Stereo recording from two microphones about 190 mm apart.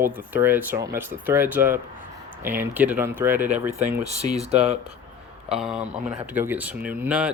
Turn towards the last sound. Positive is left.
turn(degrees=-5)  # may be behind; listen again after turning